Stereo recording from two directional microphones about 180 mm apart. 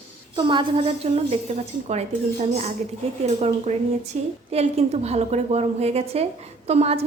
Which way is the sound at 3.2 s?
40° right (ahead or behind).